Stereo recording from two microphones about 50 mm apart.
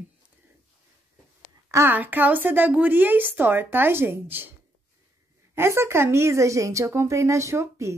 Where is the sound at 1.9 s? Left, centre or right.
Right.